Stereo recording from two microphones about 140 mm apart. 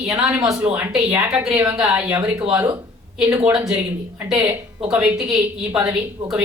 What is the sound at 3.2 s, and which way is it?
Speech, 20° right (ahead or behind).